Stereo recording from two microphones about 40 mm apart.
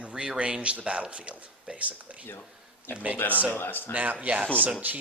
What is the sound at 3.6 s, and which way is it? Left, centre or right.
Speech, left.